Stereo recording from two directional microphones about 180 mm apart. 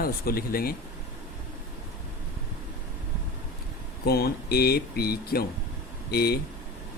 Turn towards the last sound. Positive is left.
turn(degrees=60)  # may be behind; listen again after turning